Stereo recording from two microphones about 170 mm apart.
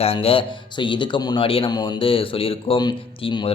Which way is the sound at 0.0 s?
35° left (ahead or behind).